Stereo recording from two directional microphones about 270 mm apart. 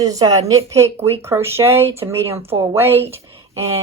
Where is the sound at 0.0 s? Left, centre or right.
Centre.